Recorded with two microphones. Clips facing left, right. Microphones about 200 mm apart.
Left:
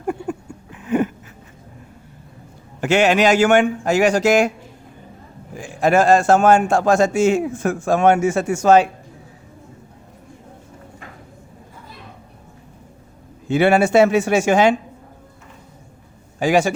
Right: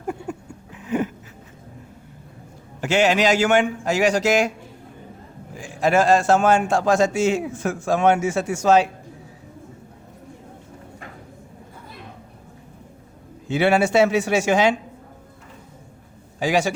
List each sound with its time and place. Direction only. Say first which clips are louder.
0.8 s a sound: left 4 dB; 55° left (ahead or behind)
2.8 s a man's voice: left 3 dB; 55° left (ahead or behind)
5.5 s a man's voice: left 3 dB; 50° left (ahead or behind)
13.5 s a man's voice: left 3 dB; 50° left (ahead or behind)
16.4 s a man's voice: left 4 dB; 50° left (ahead or behind)